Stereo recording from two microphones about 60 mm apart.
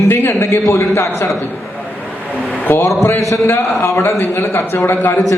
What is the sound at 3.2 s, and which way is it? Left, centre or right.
A man's voice, left.